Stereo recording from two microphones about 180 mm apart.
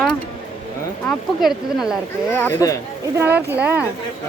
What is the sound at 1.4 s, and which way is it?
Speech, centre (ahead or behind).